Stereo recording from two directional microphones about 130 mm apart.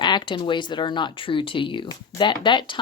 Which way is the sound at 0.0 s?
35° left (ahead or behind).